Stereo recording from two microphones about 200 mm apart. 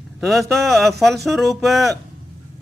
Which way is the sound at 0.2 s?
Centre (ahead or behind).